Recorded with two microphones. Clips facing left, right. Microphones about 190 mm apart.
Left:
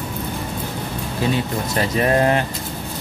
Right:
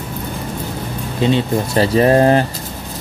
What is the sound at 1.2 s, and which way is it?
Speech, 30° right (ahead or behind).